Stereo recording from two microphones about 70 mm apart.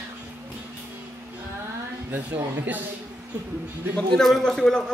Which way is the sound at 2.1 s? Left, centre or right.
Right.